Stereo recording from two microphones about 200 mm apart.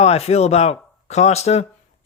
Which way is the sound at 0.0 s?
30° left (ahead or behind).